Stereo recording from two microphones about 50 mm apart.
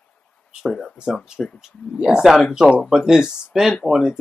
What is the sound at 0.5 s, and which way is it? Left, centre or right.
Speech, centre.